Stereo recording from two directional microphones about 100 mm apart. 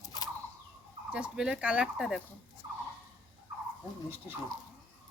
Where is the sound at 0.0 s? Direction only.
40° left (ahead or behind).